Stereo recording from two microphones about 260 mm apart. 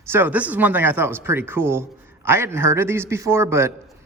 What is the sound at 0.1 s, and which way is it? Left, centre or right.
A man's voice, centre.